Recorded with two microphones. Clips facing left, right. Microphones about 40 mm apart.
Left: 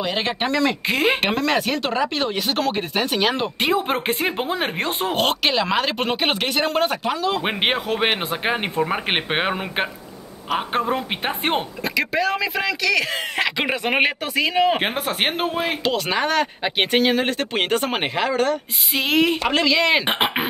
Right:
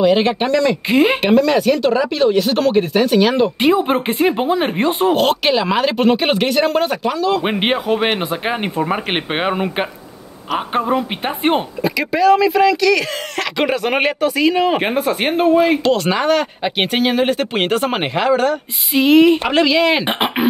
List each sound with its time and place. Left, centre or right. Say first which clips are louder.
0.0 s speech: right 9 dB; centre
15.0 s speech: right 8 dB; centre
15.6 s speech: right 8 dB; centre